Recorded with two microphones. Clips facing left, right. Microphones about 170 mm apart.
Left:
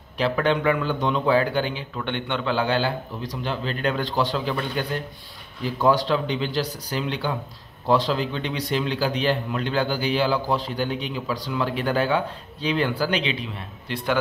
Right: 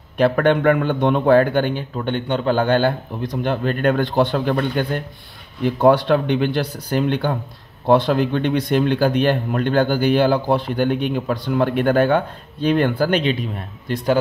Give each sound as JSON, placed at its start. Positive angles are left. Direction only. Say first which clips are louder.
{"t": 0.2, "sound": "speech", "louder": "right 6 dB", "side_deg": -55}
{"t": 2.0, "sound": "speech", "louder": "right 5 dB", "side_deg": -40}